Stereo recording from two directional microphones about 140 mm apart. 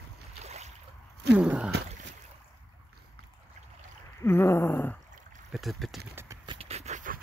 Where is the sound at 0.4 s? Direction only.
50° right (ahead or behind).